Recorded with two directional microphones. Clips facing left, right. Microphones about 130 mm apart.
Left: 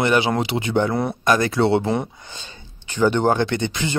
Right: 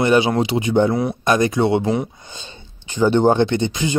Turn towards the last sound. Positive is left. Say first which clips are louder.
# right 3 dB
turn(degrees=-20)  # may be behind; listen again after turning